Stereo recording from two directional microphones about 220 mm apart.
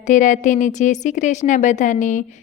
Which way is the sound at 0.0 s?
35° left (ahead or behind).